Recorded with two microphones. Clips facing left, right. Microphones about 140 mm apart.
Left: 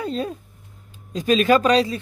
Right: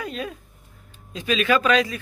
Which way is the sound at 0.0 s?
30° left (ahead or behind).